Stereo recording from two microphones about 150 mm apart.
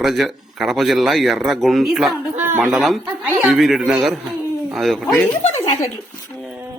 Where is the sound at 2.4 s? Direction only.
15° right (ahead or behind).